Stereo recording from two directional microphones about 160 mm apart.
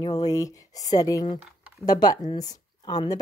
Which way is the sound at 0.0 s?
25° left (ahead or behind).